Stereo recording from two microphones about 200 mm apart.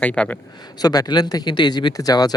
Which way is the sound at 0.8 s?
20° left (ahead or behind).